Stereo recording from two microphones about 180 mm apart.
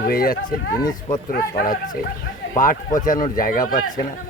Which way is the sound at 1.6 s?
50° left (ahead or behind).